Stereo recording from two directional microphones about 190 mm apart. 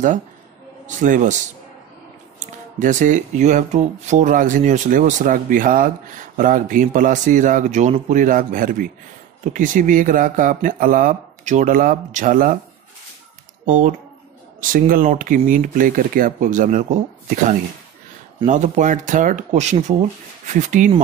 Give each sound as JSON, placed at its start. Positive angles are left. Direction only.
{"t": 0.8, "sound": "speech", "side_deg": -40}
{"t": 2.4, "sound": "speech", "side_deg": -40}
{"t": 13.7, "sound": "speech", "side_deg": -40}
{"t": 18.5, "sound": "speech", "side_deg": -40}